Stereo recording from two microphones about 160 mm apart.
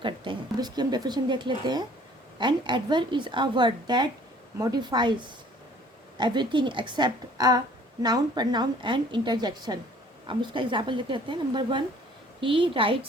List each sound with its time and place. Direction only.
0.0 s speech: 30° right (ahead or behind)
6.1 s speech: 30° right (ahead or behind)